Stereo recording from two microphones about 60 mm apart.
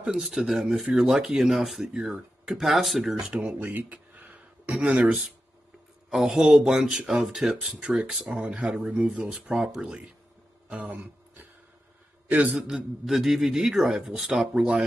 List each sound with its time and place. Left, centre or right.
0.0 s a man's voice: centre
3.3 s speech: centre
3.7 s a sound: right
6.0 s speech: centre
10.7 s a sound: right
12.3 s a man's voice: right
12.5 s a man's voice: centre
14.5 s speech: centre